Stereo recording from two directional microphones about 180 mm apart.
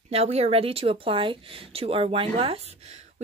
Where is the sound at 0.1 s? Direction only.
35° right (ahead or behind).